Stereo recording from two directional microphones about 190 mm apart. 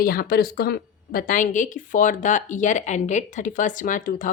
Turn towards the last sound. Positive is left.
turn(degrees=45)  # may be behind; listen again after turning